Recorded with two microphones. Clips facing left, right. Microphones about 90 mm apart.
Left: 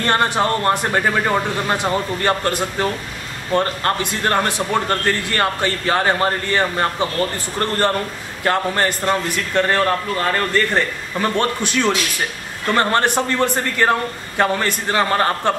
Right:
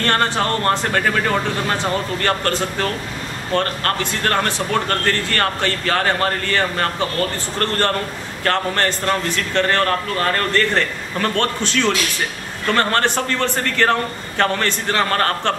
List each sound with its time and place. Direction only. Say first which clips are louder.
0.0 s a man's voice: left 1 dB; 15° left (ahead or behind)